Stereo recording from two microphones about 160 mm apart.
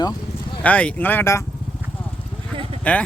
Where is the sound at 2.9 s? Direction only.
10° left (ahead or behind).